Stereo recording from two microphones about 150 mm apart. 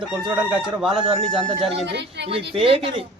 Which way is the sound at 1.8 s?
90° right.